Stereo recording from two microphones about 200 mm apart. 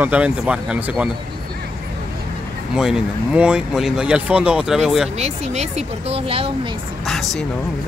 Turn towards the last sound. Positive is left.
turn(degrees=0)  # may be behind; listen again after turning